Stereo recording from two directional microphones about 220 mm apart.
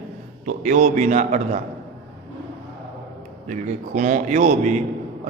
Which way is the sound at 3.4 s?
35° right (ahead or behind).